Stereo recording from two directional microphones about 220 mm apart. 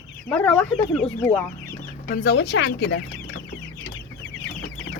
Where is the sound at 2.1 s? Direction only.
50° left (ahead or behind).